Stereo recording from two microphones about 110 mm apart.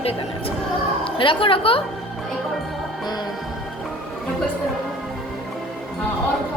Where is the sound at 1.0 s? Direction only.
50° left (ahead or behind).